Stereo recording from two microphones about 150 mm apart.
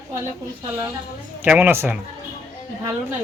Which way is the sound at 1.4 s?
10° right (ahead or behind).